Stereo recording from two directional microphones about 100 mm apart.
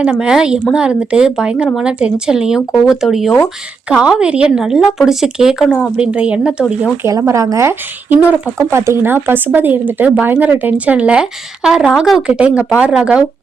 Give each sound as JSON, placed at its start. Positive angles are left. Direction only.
{"t": 0.0, "sound": "a woman's voice", "side_deg": -10}
{"t": 7.0, "sound": "speech", "side_deg": -30}
{"t": 8.2, "sound": "speech", "side_deg": -15}
{"t": 8.5, "sound": "a woman's voice", "side_deg": -25}